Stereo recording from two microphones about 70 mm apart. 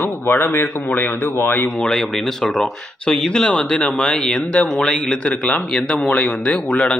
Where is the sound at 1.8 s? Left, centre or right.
Centre.